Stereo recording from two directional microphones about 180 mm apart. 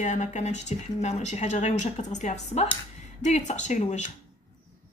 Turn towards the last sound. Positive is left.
turn(degrees=40)  # may be behind; listen again after turning